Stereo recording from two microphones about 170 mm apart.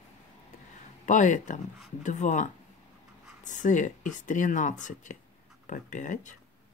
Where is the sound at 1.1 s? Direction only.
45° left (ahead or behind).